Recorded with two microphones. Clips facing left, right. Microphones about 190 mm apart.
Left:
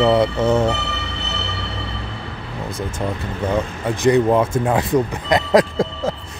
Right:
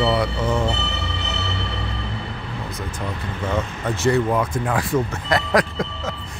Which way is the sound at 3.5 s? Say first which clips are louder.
Left 3 dB; 15° left (ahead or behind).